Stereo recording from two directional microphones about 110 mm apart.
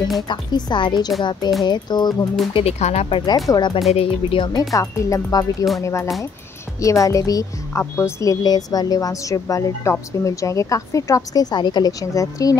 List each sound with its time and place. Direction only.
0.3 s a woman's voice: 40° left (ahead or behind)
2.5 s speech: 80° left
3.1 s a woman's voice: 35° left (ahead or behind)
3.9 s speech: 60° left (ahead or behind)
4.7 s a woman's voice: 35° left (ahead or behind)